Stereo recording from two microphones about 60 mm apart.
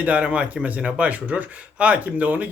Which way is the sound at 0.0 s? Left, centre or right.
Right.